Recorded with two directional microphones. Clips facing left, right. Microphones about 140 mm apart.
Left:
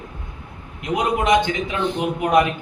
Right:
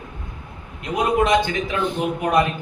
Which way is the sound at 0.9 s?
15° left (ahead or behind).